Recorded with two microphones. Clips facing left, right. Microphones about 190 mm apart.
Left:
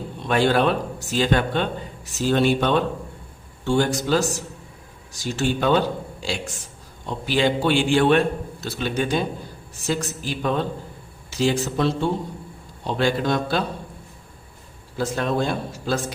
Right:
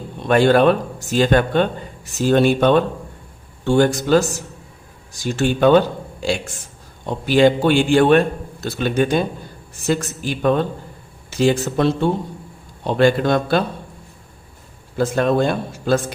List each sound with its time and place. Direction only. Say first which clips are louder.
0.3 s speech: right 6 dB; 50° right (ahead or behind)
7.1 s speech: right 7 dB; 50° right (ahead or behind)
14.9 s speech: right 6 dB; 55° right (ahead or behind)